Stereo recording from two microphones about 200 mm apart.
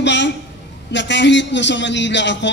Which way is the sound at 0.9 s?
65° left (ahead or behind).